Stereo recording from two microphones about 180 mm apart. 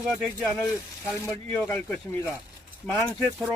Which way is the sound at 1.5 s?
10° left (ahead or behind).